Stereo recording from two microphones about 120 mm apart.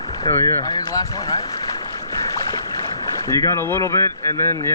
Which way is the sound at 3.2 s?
25° left (ahead or behind).